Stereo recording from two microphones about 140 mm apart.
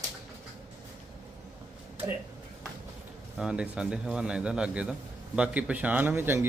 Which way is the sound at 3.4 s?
5° right (ahead or behind).